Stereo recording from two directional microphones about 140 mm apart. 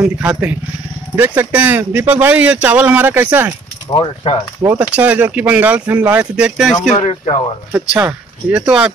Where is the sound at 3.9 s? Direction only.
30° left (ahead or behind).